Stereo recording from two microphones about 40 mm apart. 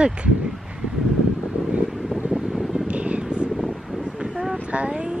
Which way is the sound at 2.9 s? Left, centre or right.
Right.